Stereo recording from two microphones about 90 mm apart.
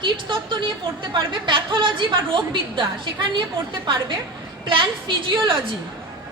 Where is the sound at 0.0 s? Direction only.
65° right (ahead or behind).